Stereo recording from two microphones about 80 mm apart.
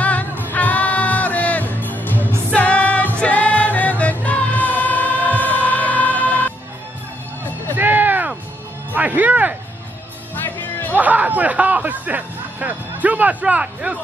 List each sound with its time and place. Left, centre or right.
0.0 s music: centre
7.7 s a sound: right
8.9 s music: centre
10.3 s music: left
11.0 s music: right